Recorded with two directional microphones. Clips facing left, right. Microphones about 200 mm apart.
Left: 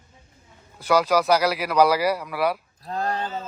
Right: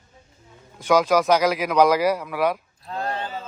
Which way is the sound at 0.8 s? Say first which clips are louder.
Right 2 dB; 10° left (ahead or behind).